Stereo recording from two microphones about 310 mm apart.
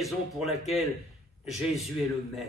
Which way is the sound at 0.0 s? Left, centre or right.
Centre.